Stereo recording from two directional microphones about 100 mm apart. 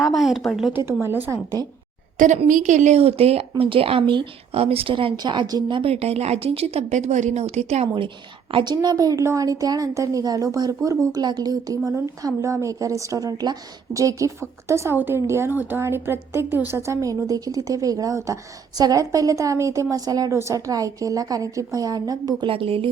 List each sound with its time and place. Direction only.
0.0 s a woman's voice: centre (ahead or behind)
0.7 s a woman's voice: 25° right (ahead or behind)
2.9 s speech: 80° right
3.6 s speech: 70° right (ahead or behind); by 4.3 s 55° right (ahead or behind)
4.5 s speech: 75° right (ahead or behind)
5.1 s a woman's voice: 50° right (ahead or behind)
5.8 s speech: 90° right
7.3 s speech: 90° right
8.5 s a woman's voice: 45° right (ahead or behind)
22.4 s speech: 70° right (ahead or behind)